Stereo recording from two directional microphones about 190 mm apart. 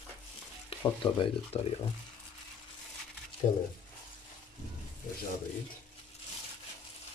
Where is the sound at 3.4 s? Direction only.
40° left (ahead or behind).